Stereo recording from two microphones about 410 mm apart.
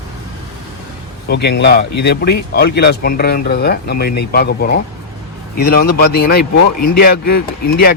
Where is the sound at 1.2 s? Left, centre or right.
Left.